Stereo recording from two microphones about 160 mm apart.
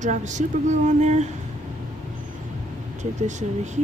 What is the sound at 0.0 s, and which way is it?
Speech, 50° right (ahead or behind).